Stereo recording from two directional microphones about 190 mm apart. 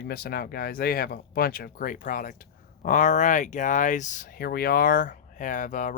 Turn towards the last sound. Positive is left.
turn(degrees=45)  # may be behind; listen again after turning